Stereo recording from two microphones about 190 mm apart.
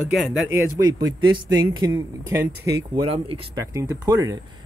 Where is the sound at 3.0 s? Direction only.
30° right (ahead or behind).